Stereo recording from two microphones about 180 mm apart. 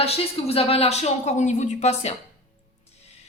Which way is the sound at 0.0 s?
35° left (ahead or behind).